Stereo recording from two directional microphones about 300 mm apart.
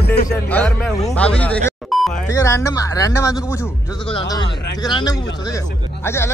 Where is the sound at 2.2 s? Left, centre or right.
Centre.